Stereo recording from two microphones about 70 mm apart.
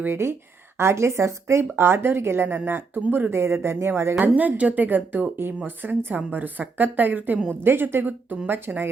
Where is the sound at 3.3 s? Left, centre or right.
Right.